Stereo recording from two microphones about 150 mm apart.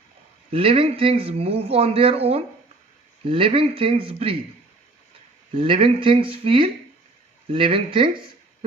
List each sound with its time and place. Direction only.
0.5 s a man's voice: 40° right (ahead or behind)
5.5 s a man's voice: 35° right (ahead or behind)